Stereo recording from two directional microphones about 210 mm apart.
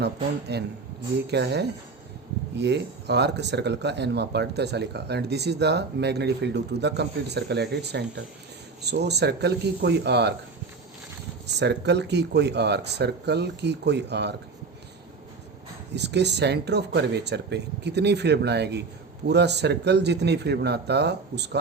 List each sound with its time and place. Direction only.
0.0 s speech: 50° right (ahead or behind)
11.4 s speech: 55° right (ahead or behind)
15.9 s speech: 55° right (ahead or behind)